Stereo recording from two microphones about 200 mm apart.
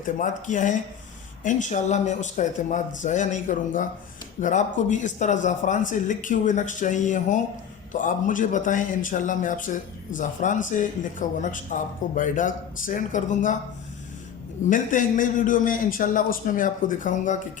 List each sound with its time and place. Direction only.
0.2 s speech: 40° left (ahead or behind)
14.7 s speech: 40° left (ahead or behind)